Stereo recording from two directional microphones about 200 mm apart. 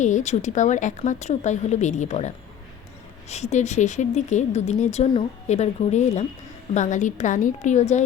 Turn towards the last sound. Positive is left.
turn(degrees=35)  # may be behind; listen again after turning